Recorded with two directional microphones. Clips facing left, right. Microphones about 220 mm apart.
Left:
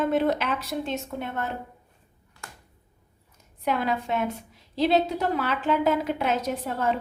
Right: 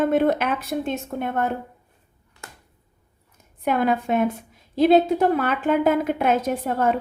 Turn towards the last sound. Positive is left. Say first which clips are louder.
# right 5 dB
turn(degrees=-50)  # may be behind; listen again after turning